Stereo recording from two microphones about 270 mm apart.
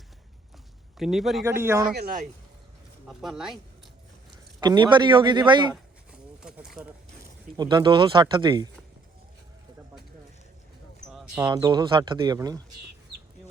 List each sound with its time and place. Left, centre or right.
0.9 s speech: centre
2.0 s speech: right
3.1 s speech: centre
4.6 s speech: centre
6.4 s speech: centre
7.5 s speech: centre
11.4 s speech: centre